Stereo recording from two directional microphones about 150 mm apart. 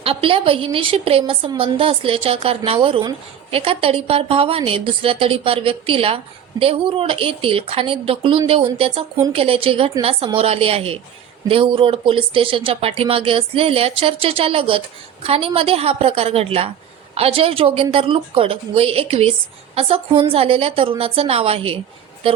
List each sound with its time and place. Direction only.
0.0 s speech: 40° right (ahead or behind)